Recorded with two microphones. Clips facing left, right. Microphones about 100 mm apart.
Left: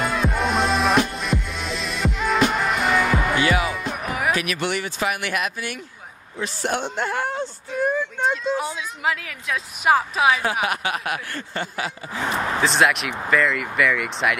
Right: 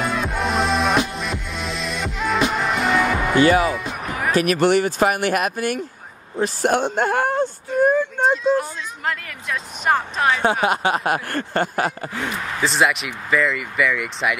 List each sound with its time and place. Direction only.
0.0 s music: centre (ahead or behind)
3.3 s music: 40° right (ahead or behind)
3.7 s music: 5° left (ahead or behind)
4.4 s speech: 45° right (ahead or behind)
8.5 s a woman's voice: 5° left (ahead or behind)
10.4 s speech: 30° right (ahead or behind)
11.2 s speech: 50° right (ahead or behind)
12.6 s a woman's voice: centre (ahead or behind)